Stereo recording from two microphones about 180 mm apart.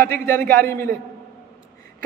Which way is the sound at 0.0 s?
10° left (ahead or behind).